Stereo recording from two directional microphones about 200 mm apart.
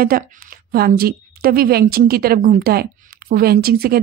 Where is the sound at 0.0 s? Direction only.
45° right (ahead or behind).